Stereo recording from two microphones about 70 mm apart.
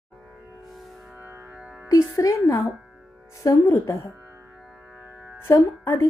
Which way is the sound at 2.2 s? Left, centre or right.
Left.